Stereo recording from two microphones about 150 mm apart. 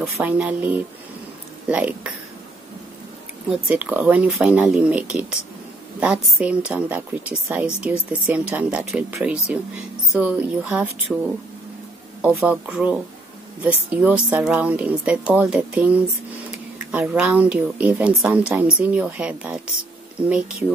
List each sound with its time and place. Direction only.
0.0 s speech: 10° right (ahead or behind)
3.4 s speech: 10° right (ahead or behind)
12.2 s speech: 5° right (ahead or behind)